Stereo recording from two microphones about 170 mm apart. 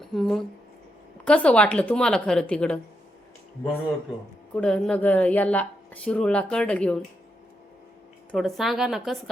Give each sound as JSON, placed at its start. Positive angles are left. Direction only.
{"t": 0.0, "sound": "speech", "side_deg": 0}
{"t": 4.5, "sound": "speech", "side_deg": 5}
{"t": 8.3, "sound": "a woman's voice", "side_deg": 0}